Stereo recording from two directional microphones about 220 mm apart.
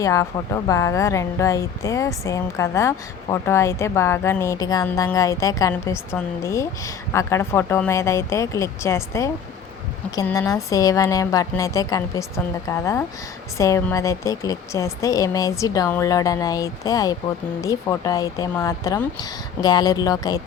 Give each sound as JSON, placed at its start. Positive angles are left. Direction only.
{"t": 0.0, "sound": "a woman's voice", "side_deg": 15}